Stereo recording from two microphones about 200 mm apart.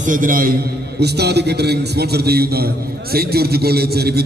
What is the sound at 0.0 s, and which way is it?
A man's voice, 40° right (ahead or behind).